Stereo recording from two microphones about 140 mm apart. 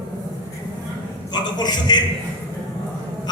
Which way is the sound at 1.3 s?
30° left (ahead or behind).